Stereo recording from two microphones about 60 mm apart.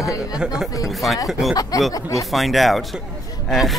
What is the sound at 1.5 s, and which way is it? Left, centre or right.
Speech, left.